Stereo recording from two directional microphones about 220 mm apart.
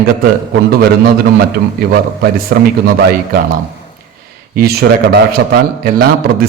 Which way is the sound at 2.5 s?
45° right (ahead or behind).